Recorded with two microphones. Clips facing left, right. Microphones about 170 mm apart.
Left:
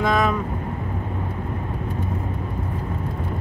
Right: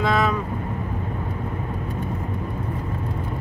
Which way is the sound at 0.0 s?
Centre (ahead or behind).